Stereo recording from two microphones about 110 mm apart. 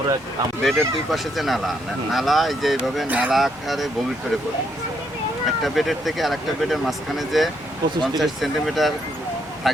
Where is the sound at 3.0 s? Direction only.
15° right (ahead or behind).